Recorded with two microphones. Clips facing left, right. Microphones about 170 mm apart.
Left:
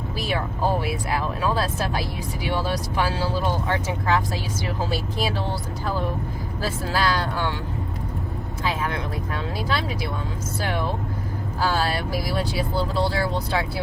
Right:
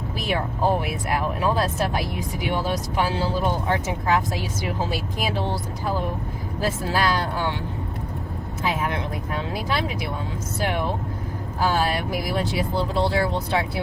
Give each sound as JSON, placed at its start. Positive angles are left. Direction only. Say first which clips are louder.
{"t": 0.2, "sound": "speech", "louder": "right 1 dB", "side_deg": -20}
{"t": 8.6, "sound": "vehicle", "louder": "right 1 dB", "side_deg": -20}
{"t": 9.6, "sound": "speech", "louder": "even", "side_deg": -15}
{"t": 11.6, "sound": "speech", "louder": "right 1 dB", "side_deg": -15}